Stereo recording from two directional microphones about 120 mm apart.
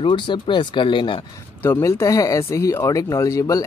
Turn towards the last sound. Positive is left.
turn(degrees=25)  # may be behind; listen again after turning